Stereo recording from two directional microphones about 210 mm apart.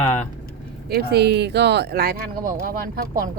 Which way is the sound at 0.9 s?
50° right (ahead or behind).